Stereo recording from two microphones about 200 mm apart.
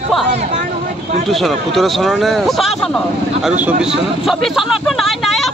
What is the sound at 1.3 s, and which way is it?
Speech, centre (ahead or behind).